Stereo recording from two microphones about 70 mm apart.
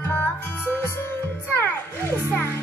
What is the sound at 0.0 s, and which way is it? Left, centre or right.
Music, left.